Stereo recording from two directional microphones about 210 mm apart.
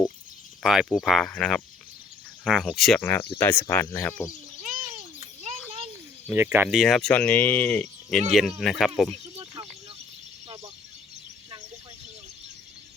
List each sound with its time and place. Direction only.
0.6 s speech: centre (ahead or behind)
5.2 s children playing: 30° right (ahead or behind)
6.2 s speech: 10° right (ahead or behind)